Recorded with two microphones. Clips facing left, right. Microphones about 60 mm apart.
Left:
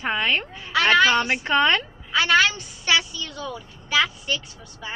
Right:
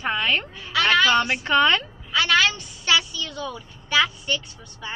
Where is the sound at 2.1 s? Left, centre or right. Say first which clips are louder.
Left 1 dB; left.